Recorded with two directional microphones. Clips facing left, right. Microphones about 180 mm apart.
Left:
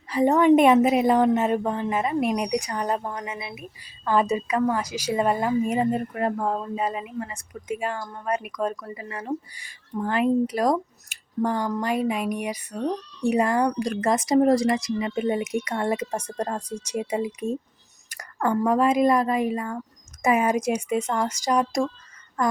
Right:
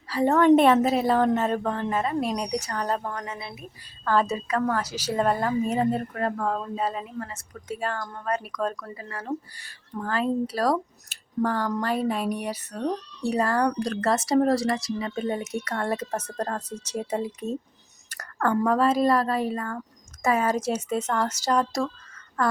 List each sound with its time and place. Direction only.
0.1 s a woman's voice: 15° left (ahead or behind)
18.1 s a sound: 10° left (ahead or behind)
18.5 s a woman's voice: 10° left (ahead or behind)